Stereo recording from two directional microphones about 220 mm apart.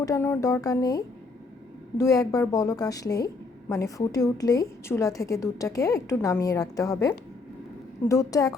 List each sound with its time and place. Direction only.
0.0 s a woman's voice: 10° left (ahead or behind)